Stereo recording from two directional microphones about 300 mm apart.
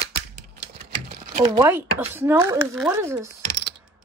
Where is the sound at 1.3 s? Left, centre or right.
Centre.